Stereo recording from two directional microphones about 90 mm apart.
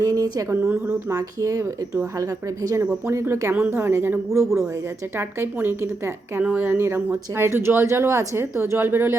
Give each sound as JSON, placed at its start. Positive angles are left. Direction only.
{"t": 0.0, "sound": "a woman's voice", "side_deg": -40}
{"t": 0.5, "sound": "speech", "side_deg": -25}
{"t": 2.6, "sound": "speech", "side_deg": -35}